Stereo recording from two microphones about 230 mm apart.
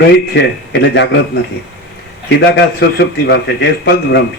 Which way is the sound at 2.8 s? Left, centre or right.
Left.